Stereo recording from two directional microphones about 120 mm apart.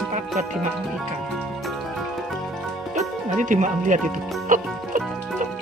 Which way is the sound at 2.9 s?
90° right.